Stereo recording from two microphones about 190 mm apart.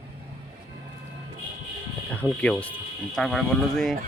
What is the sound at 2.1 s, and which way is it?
Speech, 5° left (ahead or behind).